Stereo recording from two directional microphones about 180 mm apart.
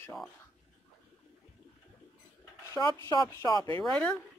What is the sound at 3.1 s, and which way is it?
Speech, 20° left (ahead or behind).